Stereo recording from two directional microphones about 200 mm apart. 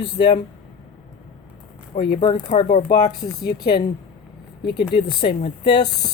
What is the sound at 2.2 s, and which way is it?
Speech, 25° left (ahead or behind).